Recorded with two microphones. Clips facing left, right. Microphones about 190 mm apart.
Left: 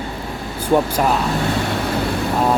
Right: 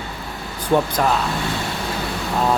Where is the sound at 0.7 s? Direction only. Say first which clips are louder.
Left 2 dB; 10° left (ahead or behind).